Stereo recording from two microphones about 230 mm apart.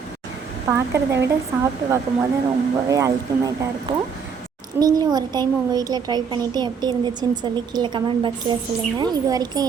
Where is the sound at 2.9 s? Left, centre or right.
Centre.